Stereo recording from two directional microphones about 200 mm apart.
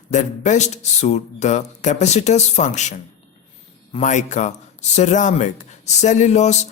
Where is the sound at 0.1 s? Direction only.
35° left (ahead or behind).